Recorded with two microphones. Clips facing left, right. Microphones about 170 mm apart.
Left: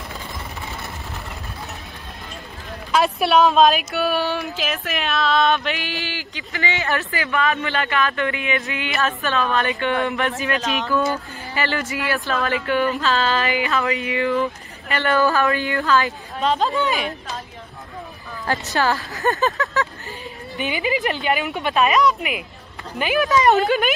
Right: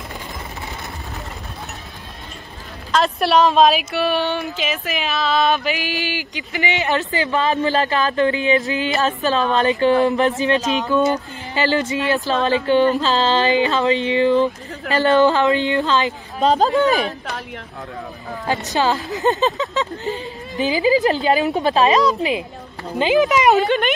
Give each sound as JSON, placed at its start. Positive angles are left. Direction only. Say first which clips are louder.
{"t": 2.9, "sound": "speech", "louder": "right 1 dB", "side_deg": 5}
{"t": 6.0, "sound": "speech", "louder": "right 5 dB", "side_deg": -15}
{"t": 16.3, "sound": "speech", "louder": "right 5 dB", "side_deg": -35}
{"t": 18.5, "sound": "speech", "louder": "right 2 dB", "side_deg": -20}
{"t": 20.5, "sound": "speech", "louder": "right 7 dB", "side_deg": -30}
{"t": 23.5, "sound": "speech", "louder": "right 1 dB", "side_deg": 0}